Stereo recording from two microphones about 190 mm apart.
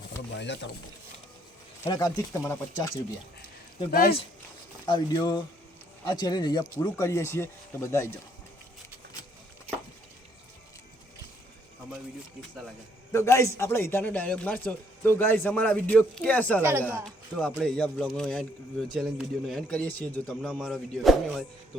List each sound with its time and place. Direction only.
0.3 s speech: 70° left (ahead or behind)
1.8 s speech: 20° left (ahead or behind)
3.9 s speech: 50° left (ahead or behind)
4.9 s speech: 20° left (ahead or behind)
13.1 s speech: 15° left (ahead or behind); by 21.4 s centre (ahead or behind)